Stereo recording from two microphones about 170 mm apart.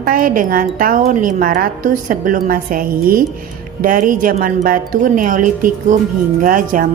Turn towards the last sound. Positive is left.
turn(degrees=-55)  # may be behind; listen again after turning